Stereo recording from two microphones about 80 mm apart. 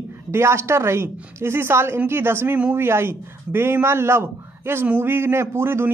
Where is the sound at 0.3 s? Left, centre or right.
Right.